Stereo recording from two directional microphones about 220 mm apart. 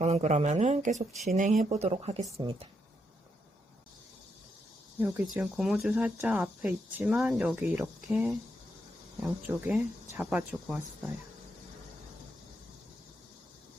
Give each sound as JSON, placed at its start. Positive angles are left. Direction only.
{"t": 0.0, "sound": "speech", "side_deg": -30}
{"t": 4.9, "sound": "speech", "side_deg": -10}